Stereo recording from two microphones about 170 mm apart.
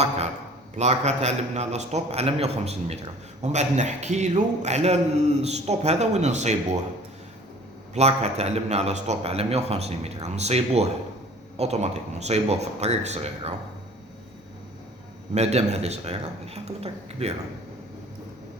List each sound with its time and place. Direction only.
0.8 s a man's voice: 40° right (ahead or behind)
7.9 s a man's voice: 40° right (ahead or behind)
15.4 s a man's voice: 40° right (ahead or behind)